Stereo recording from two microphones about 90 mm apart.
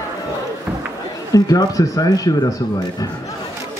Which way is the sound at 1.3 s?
40° left (ahead or behind).